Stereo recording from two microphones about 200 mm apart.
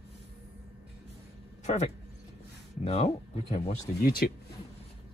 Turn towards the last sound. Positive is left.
turn(degrees=50)  # may be behind; listen again after turning